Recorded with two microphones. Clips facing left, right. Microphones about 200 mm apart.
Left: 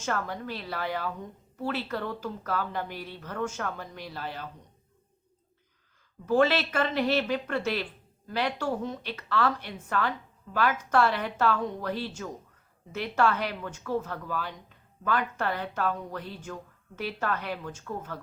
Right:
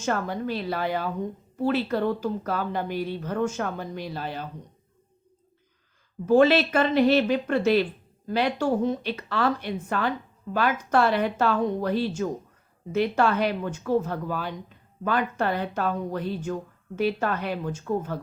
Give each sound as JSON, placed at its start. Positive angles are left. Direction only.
{"t": 0.0, "sound": "speech", "side_deg": -20}
{"t": 6.2, "sound": "speech", "side_deg": -20}